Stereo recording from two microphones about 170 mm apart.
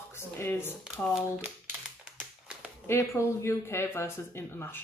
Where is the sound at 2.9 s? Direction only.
15° left (ahead or behind).